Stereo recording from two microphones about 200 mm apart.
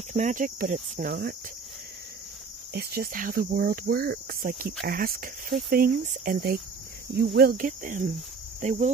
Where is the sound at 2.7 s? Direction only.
50° right (ahead or behind).